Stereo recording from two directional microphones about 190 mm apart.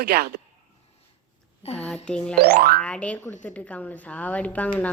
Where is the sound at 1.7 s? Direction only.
5° left (ahead or behind).